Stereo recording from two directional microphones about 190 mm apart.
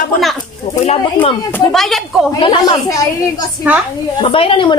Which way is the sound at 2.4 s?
25° left (ahead or behind).